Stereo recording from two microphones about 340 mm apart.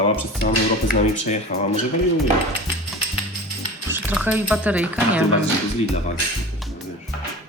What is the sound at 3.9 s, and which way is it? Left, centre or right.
Speech, centre.